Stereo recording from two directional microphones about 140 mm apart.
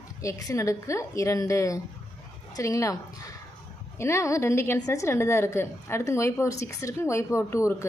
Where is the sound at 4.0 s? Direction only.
20° left (ahead or behind).